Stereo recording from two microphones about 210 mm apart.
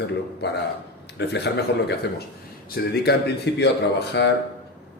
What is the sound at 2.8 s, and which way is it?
A man's voice, 50° left (ahead or behind).